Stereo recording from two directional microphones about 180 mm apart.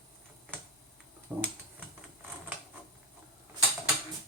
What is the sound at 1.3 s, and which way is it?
Speech, 10° right (ahead or behind).